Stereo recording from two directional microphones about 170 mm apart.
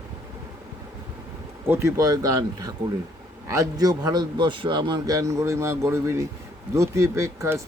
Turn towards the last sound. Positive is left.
turn(degrees=-15)  # may be behind; listen again after turning